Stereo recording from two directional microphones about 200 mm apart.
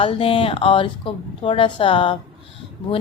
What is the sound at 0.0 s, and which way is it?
A woman's voice, 30° left (ahead or behind).